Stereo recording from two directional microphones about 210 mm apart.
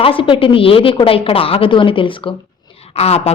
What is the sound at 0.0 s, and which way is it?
A woman's voice, 25° left (ahead or behind).